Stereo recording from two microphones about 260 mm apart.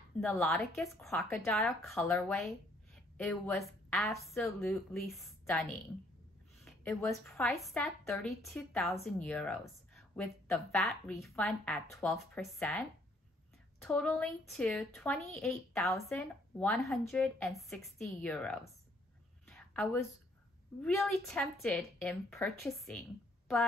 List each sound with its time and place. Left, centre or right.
0.2 s a woman's voice: centre
13.8 s speech: centre
19.4 s a sound: centre
20.8 s speech: centre